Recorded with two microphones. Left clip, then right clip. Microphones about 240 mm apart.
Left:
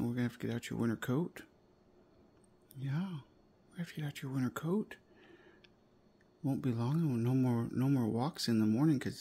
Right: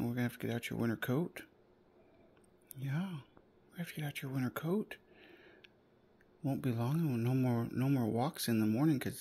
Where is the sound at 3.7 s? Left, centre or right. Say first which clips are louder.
Right 1 dB; centre.